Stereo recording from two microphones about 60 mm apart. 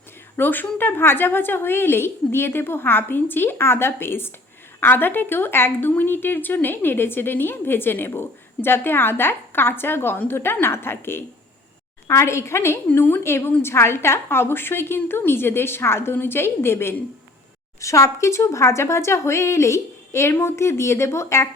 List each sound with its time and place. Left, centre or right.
0.3 s a woman's voice: left
12.9 s a woman's voice: left
17.7 s a woman's voice: left